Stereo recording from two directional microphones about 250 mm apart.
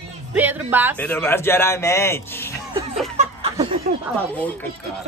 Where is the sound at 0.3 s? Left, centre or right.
Centre.